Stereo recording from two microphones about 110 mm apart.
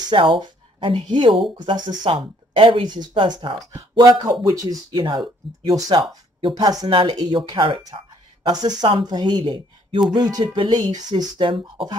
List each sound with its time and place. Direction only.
0.0 s speech: 45° right (ahead or behind)
4.9 s speech: 50° right (ahead or behind)
6.9 s speech: 50° right (ahead or behind)
7.2 s speech: 35° right (ahead or behind)
8.5 s speech: 40° right (ahead or behind)